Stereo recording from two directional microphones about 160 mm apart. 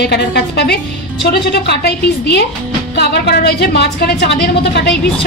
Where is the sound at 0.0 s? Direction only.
90° left.